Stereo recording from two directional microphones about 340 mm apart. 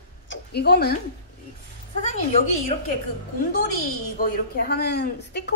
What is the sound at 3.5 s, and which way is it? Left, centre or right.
A woman's voice, left.